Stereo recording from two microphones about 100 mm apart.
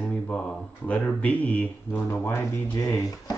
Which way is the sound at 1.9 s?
25° left (ahead or behind).